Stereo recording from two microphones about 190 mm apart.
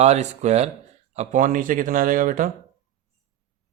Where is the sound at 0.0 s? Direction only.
35° right (ahead or behind).